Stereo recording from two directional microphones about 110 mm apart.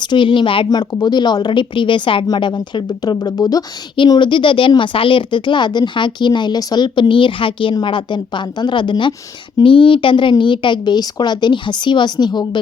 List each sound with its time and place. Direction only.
0.0 s speech: 45° left (ahead or behind)